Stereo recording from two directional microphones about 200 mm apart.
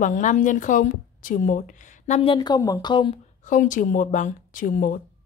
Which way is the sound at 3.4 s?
40° left (ahead or behind).